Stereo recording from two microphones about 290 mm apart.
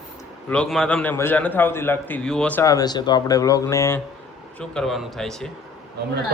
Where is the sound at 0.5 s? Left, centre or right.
Centre.